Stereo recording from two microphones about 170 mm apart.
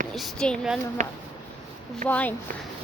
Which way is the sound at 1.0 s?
45° right (ahead or behind).